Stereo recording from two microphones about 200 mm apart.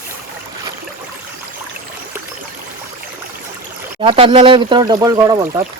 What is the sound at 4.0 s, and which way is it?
Speech, 25° right (ahead or behind).